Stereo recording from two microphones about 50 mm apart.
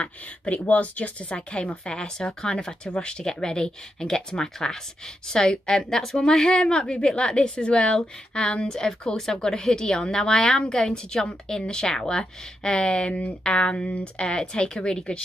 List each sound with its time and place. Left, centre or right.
0.0 s a woman's voice: left
14.2 s a woman's voice: centre